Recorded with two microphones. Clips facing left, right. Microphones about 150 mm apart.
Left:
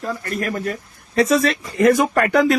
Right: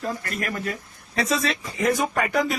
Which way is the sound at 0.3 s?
40° left (ahead or behind).